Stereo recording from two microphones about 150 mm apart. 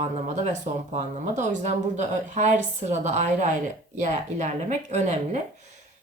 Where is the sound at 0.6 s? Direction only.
50° right (ahead or behind).